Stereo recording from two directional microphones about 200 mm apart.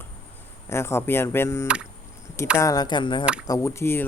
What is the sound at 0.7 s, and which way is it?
Speech, 10° left (ahead or behind).